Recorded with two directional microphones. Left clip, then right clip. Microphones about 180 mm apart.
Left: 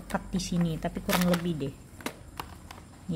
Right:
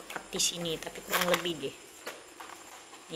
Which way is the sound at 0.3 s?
5° left (ahead or behind).